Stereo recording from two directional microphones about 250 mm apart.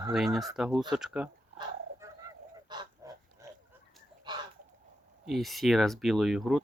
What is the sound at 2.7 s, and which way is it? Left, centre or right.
Goose, centre.